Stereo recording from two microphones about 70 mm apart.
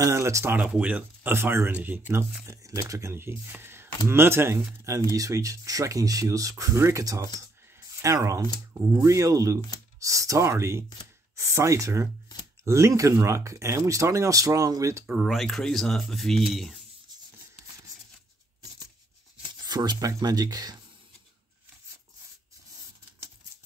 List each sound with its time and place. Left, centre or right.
0.0 s speech: right
0.7 s speech: right
1.3 s speech: right
2.4 s speech: right
15.0 s speech: centre
19.6 s speech: right